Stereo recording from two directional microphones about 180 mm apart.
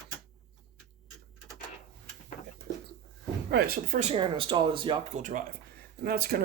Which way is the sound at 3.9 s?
35° right (ahead or behind).